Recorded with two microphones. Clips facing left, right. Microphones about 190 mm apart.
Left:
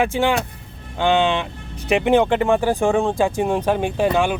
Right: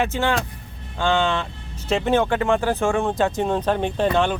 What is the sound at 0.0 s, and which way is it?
Speech, 15° left (ahead or behind).